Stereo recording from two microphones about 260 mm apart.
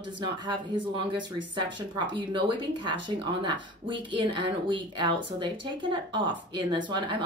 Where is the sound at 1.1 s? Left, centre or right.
Centre.